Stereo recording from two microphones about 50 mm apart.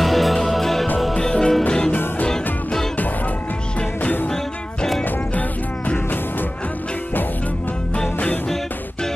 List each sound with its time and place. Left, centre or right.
0.0 s music: centre
1.1 s music: centre
1.9 s music: left
2.2 s music: centre
4.0 s music: left